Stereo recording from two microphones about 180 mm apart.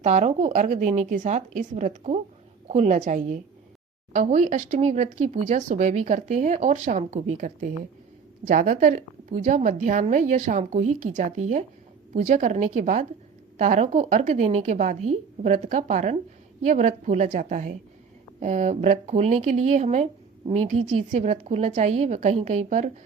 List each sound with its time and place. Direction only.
0.0 s a woman's voice: 40° right (ahead or behind)